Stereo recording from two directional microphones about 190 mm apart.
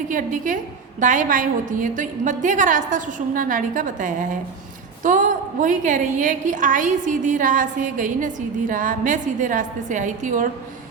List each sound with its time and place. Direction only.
0.1 s a woman's voice: 45° right (ahead or behind)